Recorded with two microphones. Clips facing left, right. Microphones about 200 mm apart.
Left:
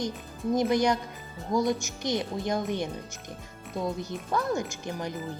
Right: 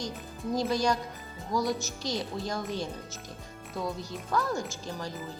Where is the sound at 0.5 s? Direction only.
20° left (ahead or behind).